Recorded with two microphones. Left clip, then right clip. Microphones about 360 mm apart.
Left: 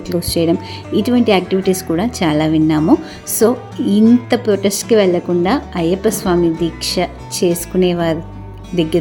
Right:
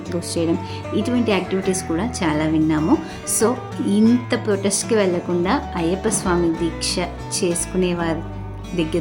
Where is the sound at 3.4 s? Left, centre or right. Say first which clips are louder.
Left 6 dB; centre.